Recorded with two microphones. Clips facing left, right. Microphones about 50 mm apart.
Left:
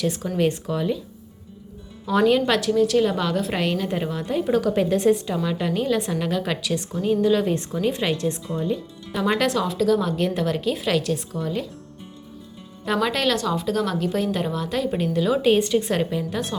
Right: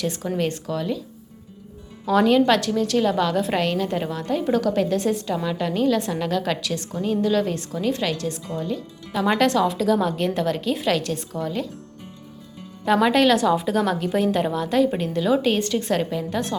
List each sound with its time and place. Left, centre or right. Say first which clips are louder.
0.0 s a woman's voice: left 2 dB; centre
2.0 s a woman's voice: right 2 dB; centre
9.1 s a woman's voice: right 2 dB; centre
12.8 s a woman's voice: right 5 dB; centre